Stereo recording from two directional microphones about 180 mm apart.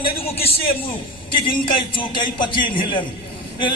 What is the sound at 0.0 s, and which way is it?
A man's voice, 35° left (ahead or behind).